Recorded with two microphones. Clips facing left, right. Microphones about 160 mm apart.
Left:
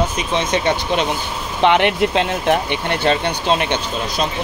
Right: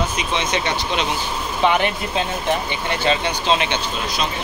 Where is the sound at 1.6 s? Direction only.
70° left (ahead or behind).